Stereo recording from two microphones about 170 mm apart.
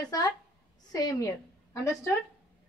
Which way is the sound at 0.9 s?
20° left (ahead or behind).